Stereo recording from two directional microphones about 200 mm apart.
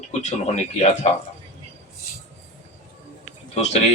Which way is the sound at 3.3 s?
30° left (ahead or behind).